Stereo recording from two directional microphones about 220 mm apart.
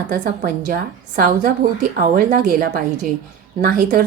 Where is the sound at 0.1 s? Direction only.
40° right (ahead or behind).